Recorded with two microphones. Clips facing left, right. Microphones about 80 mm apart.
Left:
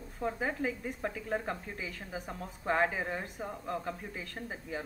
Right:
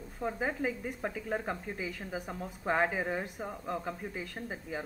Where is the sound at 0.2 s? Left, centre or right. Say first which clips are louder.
Even; centre.